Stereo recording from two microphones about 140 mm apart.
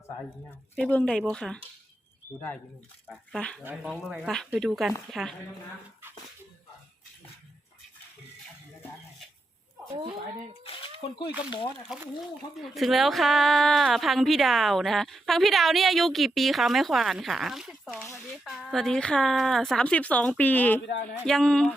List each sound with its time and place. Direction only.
0.8 s a woman's voice: 10° left (ahead or behind)
3.3 s a woman's voice: 5° left (ahead or behind)
3.6 s speech: 15° right (ahead or behind)
4.0 s a woman's voice: centre (ahead or behind)
10.6 s speech: 40° left (ahead or behind)
11.9 s a woman's voice: 5° right (ahead or behind)